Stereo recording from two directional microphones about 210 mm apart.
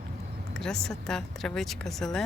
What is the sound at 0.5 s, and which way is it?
Speech, 5° left (ahead or behind).